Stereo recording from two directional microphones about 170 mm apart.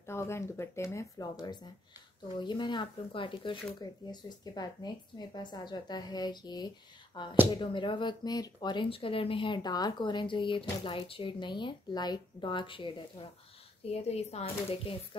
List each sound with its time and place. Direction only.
0.0 s speech: 15° left (ahead or behind); by 15.0 s 35° left (ahead or behind)